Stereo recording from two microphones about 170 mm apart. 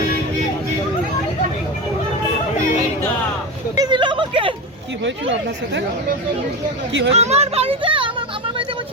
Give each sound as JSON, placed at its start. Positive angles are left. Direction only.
{"t": 3.8, "sound": "a sound", "side_deg": -25}
{"t": 5.0, "sound": "speech", "side_deg": -90}
{"t": 7.1, "sound": "a child's voice", "side_deg": -40}